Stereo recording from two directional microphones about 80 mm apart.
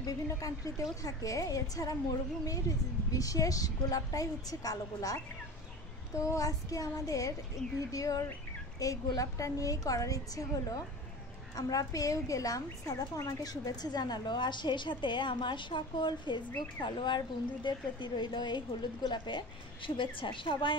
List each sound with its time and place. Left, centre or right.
0.0 s a woman's voice: left
16.8 s a woman's voice: left